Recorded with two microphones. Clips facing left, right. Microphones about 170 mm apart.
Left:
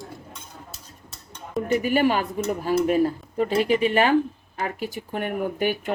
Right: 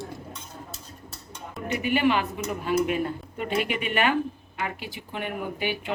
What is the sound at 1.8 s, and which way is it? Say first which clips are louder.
Speech: right 2 dB; 40° left (ahead or behind).